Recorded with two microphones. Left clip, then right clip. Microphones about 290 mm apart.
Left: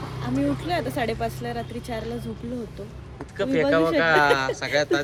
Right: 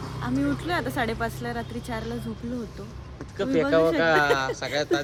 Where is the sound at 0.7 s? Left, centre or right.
Centre.